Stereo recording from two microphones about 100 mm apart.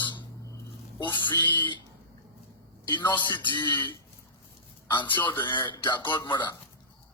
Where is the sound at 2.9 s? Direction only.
50° left (ahead or behind).